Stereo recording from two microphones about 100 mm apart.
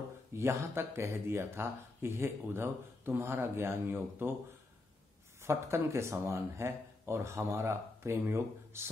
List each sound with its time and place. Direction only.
0.3 s speech: 25° right (ahead or behind)
5.4 s speech: 25° right (ahead or behind)